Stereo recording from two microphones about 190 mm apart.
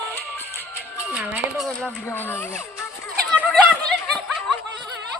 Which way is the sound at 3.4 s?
5° right (ahead or behind).